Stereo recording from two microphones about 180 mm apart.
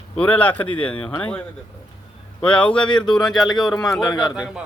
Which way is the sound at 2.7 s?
25° left (ahead or behind).